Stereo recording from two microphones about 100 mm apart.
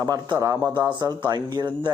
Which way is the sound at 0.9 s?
45° right (ahead or behind).